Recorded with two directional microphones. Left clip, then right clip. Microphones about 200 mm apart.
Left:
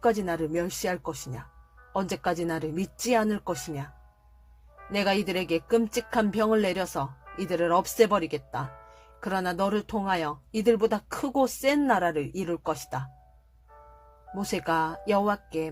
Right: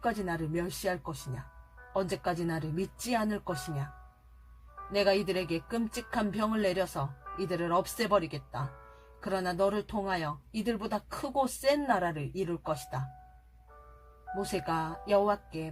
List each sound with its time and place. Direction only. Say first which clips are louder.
0.0 s speech: left 7 dB; 45° left (ahead or behind)
4.9 s speech: left 1 dB; 45° left (ahead or behind)
14.5 s speech: left 8 dB; 45° left (ahead or behind)